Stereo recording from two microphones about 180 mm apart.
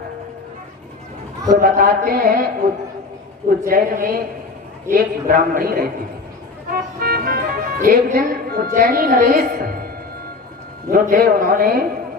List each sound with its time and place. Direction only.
1.5 s a man's voice: 50° right (ahead or behind)
3.7 s a man's voice: 50° right (ahead or behind)
6.7 s music: 55° right (ahead or behind)
10.8 s a man's voice: 50° right (ahead or behind)